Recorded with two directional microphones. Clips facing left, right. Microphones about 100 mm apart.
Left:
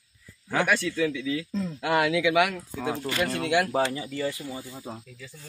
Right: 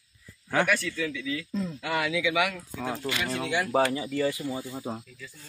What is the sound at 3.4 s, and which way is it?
Speech, 60° left (ahead or behind).